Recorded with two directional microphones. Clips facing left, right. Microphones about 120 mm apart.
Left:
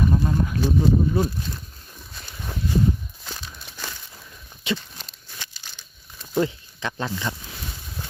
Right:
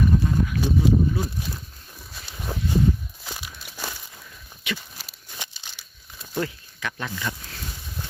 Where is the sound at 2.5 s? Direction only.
35° right (ahead or behind).